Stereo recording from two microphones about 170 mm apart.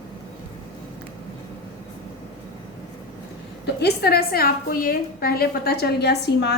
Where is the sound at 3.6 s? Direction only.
70° left (ahead or behind).